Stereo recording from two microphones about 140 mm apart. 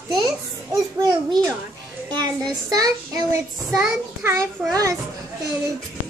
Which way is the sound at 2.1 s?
30° right (ahead or behind).